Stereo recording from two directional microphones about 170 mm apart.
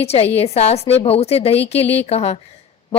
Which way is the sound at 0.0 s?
35° left (ahead or behind).